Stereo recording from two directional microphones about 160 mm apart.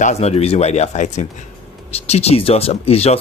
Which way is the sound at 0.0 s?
45° left (ahead or behind).